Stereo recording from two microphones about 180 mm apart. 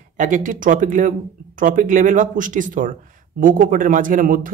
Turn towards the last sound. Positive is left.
turn(degrees=-50)  # may be behind; listen again after turning